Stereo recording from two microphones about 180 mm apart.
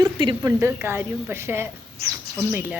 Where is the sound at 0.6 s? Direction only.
15° right (ahead or behind).